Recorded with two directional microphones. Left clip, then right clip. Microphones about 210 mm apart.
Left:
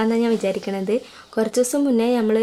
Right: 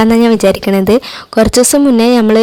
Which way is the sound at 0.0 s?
55° right (ahead or behind).